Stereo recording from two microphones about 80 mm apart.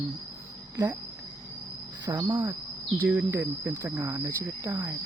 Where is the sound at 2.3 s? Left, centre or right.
Right.